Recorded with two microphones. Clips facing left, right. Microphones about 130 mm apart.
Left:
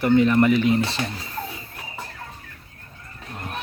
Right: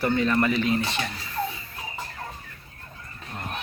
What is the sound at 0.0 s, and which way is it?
Speech, 15° left (ahead or behind).